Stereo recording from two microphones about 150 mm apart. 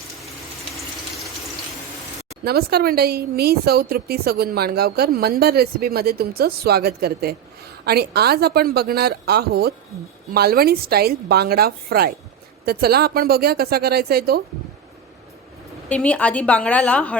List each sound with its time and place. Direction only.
2.4 s speech: 90° right
15.9 s a woman's voice: 10° left (ahead or behind)